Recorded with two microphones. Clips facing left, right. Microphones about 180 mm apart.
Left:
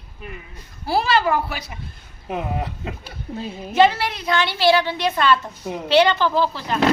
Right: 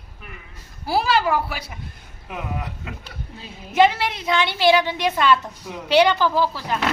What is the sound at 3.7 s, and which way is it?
A woman's voice, 20° right (ahead or behind).